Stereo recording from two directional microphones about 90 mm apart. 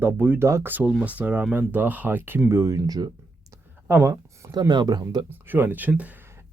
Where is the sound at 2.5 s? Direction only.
35° right (ahead or behind).